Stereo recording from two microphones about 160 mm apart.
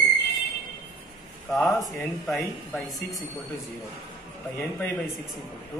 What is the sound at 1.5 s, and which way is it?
Speech, centre (ahead or behind).